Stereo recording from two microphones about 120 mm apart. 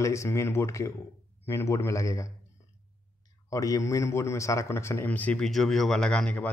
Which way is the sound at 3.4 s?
30° left (ahead or behind).